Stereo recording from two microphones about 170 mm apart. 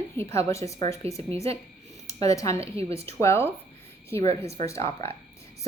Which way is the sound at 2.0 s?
20° left (ahead or behind).